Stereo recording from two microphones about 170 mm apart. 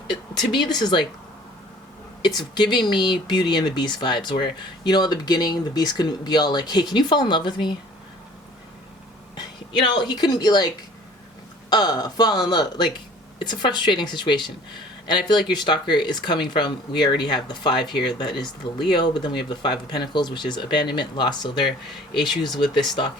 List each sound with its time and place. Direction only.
0.1 s speech: 25° left (ahead or behind)
2.2 s speech: 25° left (ahead or behind)
9.3 s speech: 25° left (ahead or behind)
11.7 s speech: 25° left (ahead or behind)